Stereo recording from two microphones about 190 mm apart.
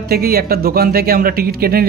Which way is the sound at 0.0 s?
55° right (ahead or behind).